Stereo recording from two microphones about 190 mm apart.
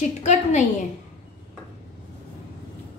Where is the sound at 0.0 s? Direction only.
40° left (ahead or behind).